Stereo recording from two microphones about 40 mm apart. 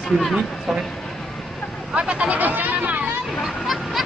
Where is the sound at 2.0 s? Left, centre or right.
Right.